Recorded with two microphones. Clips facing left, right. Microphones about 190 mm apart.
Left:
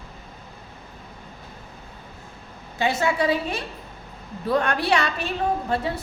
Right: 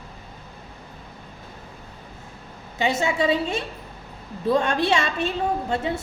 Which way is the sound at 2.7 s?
20° right (ahead or behind).